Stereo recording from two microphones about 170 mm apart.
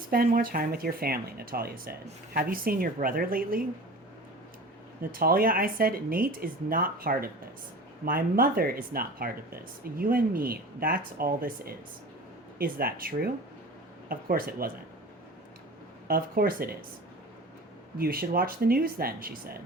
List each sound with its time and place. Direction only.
0.1 s speech: 60° right (ahead or behind)
5.1 s speech: 60° right (ahead or behind)
16.0 s speech: 60° right (ahead or behind)
17.9 s speech: 60° right (ahead or behind)